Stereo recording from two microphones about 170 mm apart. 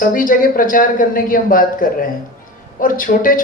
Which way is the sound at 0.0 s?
55° left (ahead or behind).